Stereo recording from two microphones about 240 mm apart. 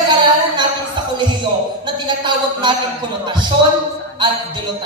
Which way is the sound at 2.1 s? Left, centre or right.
Centre.